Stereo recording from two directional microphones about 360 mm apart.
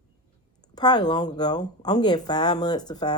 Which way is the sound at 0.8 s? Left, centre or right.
Centre.